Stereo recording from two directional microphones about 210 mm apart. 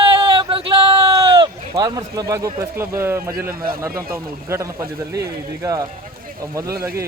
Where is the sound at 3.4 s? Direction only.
45° right (ahead or behind).